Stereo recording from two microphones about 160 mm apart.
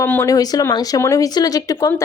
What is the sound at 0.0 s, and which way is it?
A woman's voice, 15° left (ahead or behind).